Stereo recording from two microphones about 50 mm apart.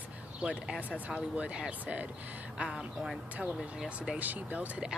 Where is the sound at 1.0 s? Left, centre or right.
Right.